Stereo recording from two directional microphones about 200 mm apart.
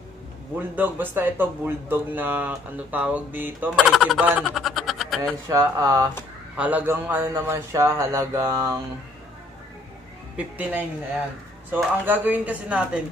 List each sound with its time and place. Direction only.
0.6 s speech: 10° right (ahead or behind)
5.5 s speech: 15° right (ahead or behind)
10.3 s speech: 5° right (ahead or behind)